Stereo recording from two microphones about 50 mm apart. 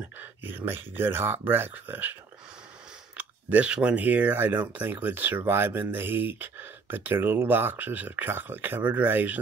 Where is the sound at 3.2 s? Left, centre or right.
Right.